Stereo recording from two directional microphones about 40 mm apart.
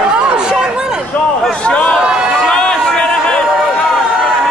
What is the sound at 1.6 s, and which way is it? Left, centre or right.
Speech, left.